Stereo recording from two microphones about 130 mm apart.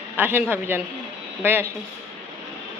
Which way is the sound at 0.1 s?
15° right (ahead or behind).